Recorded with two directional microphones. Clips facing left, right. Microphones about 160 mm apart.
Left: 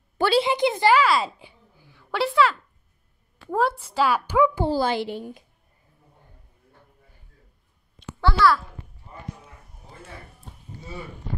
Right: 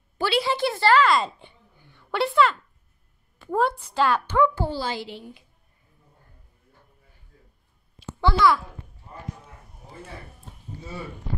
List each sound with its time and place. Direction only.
0.4 s a woman's voice: 20° left (ahead or behind)
4.7 s a woman's voice: 55° left (ahead or behind)
8.2 s a child's voice: 15° right (ahead or behind)